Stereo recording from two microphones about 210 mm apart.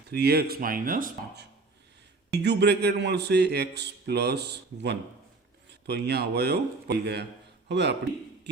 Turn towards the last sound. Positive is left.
turn(degrees=-55)  # may be behind; listen again after turning